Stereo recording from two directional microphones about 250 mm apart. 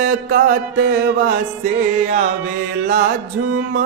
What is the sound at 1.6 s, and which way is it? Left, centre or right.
Speech, right.